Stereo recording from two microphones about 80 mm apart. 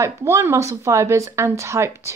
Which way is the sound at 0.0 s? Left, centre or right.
Right.